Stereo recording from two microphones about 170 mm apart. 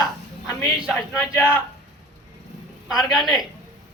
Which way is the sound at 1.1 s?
15° left (ahead or behind).